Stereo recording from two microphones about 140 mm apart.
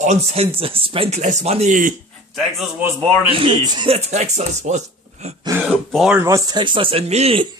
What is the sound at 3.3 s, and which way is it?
Speech, 35° right (ahead or behind).